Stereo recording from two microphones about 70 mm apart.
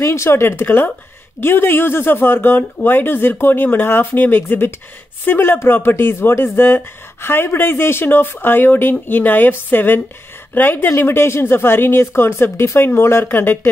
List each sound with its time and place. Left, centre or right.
0.0 s speech: left